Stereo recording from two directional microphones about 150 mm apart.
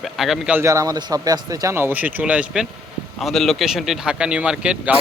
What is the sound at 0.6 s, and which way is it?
Speech, 20° right (ahead or behind).